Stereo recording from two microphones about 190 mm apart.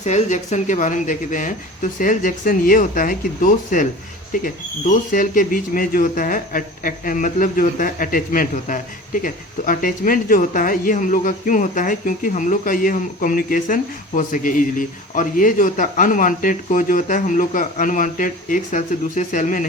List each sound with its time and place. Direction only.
0.0 s a man's voice: 40° left (ahead or behind)